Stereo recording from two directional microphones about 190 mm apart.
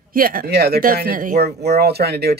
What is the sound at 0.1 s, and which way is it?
Speech, 50° right (ahead or behind).